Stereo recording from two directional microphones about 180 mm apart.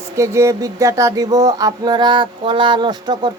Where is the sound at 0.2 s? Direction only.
15° right (ahead or behind).